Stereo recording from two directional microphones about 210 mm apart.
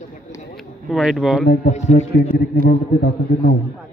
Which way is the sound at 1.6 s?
35° left (ahead or behind).